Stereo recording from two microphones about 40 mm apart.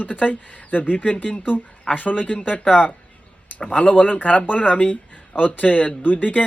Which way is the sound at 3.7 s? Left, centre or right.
Left.